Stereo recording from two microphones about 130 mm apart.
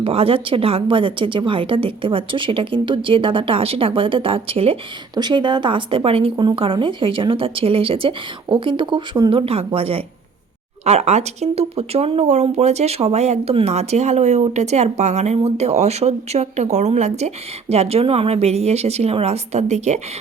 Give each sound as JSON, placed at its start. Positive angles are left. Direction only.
{"t": 0.0, "sound": "a woman's voice", "side_deg": -45}
{"t": 5.1, "sound": "speech", "side_deg": -35}
{"t": 9.5, "sound": "a woman's voice", "side_deg": -50}